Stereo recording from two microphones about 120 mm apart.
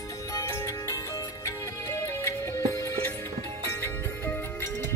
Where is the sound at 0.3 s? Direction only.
25° left (ahead or behind).